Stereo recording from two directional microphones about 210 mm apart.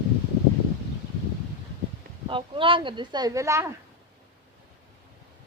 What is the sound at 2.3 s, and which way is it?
Speech, 25° right (ahead or behind).